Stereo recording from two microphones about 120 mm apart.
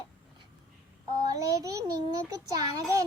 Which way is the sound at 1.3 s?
30° right (ahead or behind).